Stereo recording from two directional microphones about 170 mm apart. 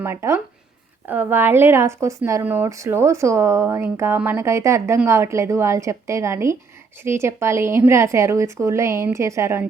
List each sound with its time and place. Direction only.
0.0 s speech: 15° right (ahead or behind)